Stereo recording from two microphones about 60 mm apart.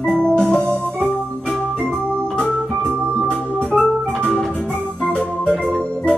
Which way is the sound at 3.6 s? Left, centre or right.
Centre.